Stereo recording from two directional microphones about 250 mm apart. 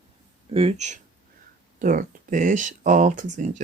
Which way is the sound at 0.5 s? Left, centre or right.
Right.